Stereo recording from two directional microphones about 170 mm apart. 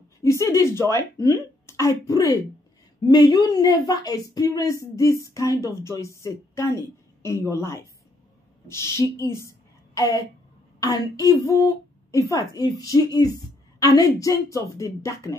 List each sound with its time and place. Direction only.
0.2 s speech: 15° left (ahead or behind)
9.5 s a sound: 20° left (ahead or behind)
10.8 s speech: 20° left (ahead or behind)